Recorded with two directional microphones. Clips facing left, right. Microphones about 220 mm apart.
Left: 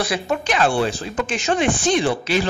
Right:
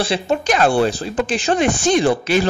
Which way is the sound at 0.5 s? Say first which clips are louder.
Right 4 dB; 40° right (ahead or behind).